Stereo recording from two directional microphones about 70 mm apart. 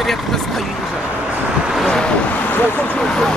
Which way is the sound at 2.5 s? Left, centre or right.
Left.